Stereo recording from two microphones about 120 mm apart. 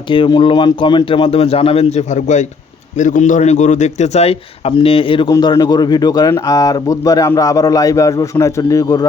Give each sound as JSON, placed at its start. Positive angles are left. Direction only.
{"t": 0.1, "sound": "speech", "side_deg": 45}
{"t": 3.0, "sound": "a man's voice", "side_deg": 90}
{"t": 4.8, "sound": "speech", "side_deg": 50}
{"t": 5.3, "sound": "speech", "side_deg": 35}